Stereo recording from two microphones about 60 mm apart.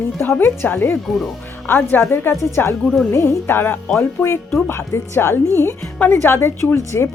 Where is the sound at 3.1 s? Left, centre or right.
Left.